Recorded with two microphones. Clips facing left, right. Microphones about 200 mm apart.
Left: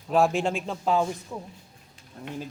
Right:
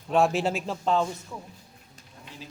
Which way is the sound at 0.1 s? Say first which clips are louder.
Even; centre (ahead or behind).